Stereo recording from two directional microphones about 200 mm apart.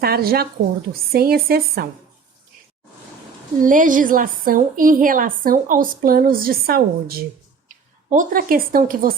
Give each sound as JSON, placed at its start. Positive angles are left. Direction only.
{"t": 0.0, "sound": "a woman's voice", "side_deg": -50}
{"t": 3.6, "sound": "a woman's voice", "side_deg": -40}